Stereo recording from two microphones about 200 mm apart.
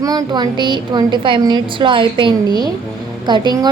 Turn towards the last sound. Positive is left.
turn(degrees=-20)  # may be behind; listen again after turning